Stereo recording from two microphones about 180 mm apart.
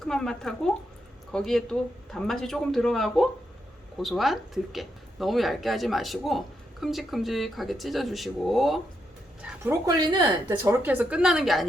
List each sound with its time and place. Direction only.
0.0 s a woman's voice: 5° left (ahead or behind)
9.8 s speech: 25° right (ahead or behind)
10.6 s a woman's voice: 10° right (ahead or behind)